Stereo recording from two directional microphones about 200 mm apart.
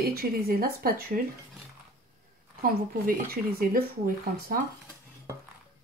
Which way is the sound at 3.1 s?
50° right (ahead or behind).